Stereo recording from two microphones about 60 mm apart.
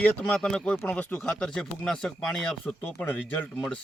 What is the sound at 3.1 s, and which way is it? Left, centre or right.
Speech, left.